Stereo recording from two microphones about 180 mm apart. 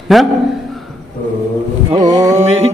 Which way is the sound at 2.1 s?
20° right (ahead or behind).